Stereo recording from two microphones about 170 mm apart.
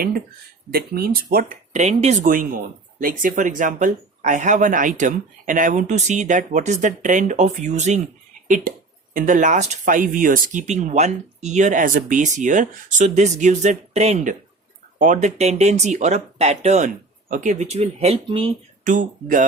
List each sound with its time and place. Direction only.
0.7 s speech: 65° right (ahead or behind); by 2.2 s 40° right (ahead or behind)
2.2 s speech: 55° right (ahead or behind); by 18.5 s 35° right (ahead or behind)
18.9 s speech: 50° right (ahead or behind)